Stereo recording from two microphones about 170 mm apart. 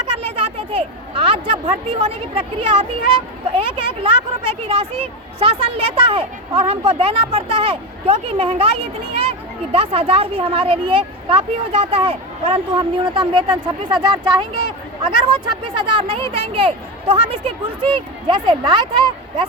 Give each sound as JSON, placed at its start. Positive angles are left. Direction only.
{"t": 0.1, "sound": "a woman's voice", "side_deg": -35}